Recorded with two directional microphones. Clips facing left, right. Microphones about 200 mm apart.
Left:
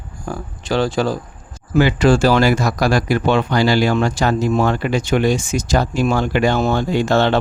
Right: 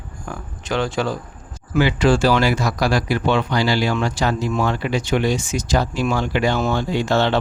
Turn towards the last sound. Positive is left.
turn(degrees=50)  # may be behind; listen again after turning